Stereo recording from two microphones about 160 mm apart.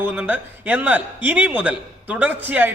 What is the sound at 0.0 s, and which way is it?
A man's voice, 10° right (ahead or behind).